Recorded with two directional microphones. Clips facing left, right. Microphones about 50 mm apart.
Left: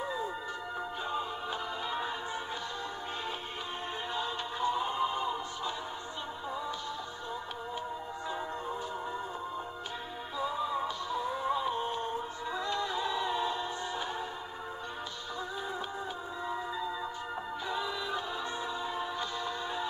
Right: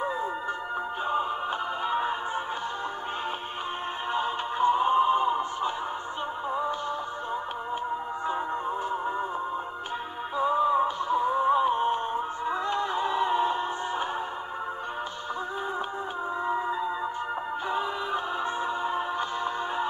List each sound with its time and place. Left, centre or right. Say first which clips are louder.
1.9 s music: right 9 dB; right
4.1 s music: right 9 dB; right
8.3 s music: right 7 dB; right
10.3 s music: right 10 dB; right
16.4 s music: right 6 dB; right